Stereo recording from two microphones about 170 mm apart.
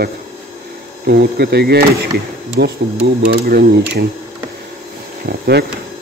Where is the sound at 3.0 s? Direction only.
55° right (ahead or behind).